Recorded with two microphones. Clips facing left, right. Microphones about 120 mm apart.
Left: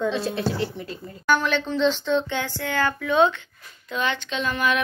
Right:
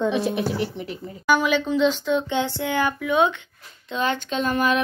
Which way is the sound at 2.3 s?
20° right (ahead or behind).